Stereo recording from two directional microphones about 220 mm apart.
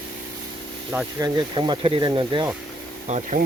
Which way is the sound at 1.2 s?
20° right (ahead or behind).